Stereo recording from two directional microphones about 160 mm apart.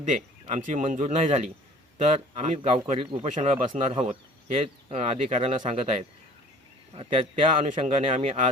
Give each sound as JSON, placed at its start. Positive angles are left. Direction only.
{"t": 0.0, "sound": "speech", "side_deg": -50}
{"t": 3.2, "sound": "speech", "side_deg": -50}